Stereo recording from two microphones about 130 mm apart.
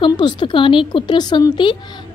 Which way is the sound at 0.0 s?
35° left (ahead or behind).